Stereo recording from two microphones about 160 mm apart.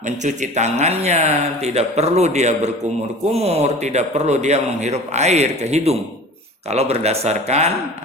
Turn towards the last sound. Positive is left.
turn(degrees=-40)  # may be behind; listen again after turning